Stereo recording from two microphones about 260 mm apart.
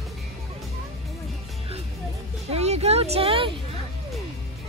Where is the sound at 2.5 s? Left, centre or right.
Right.